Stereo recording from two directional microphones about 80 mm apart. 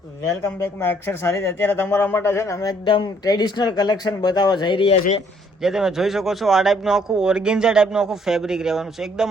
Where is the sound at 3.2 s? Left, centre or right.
Left.